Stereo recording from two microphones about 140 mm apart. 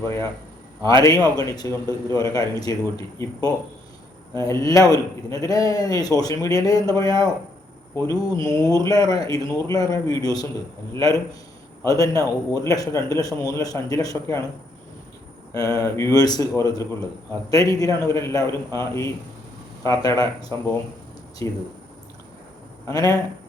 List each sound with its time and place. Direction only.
0.0 s a man's voice: 20° left (ahead or behind)
1.4 s a man's voice: 25° left (ahead or behind)
15.5 s a man's voice: 25° left (ahead or behind)
22.9 s a man's voice: 25° left (ahead or behind)